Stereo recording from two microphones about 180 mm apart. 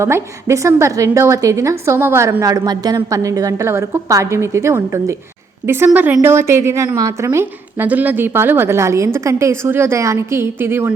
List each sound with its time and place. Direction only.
0.0 s a woman's voice: 15° right (ahead or behind)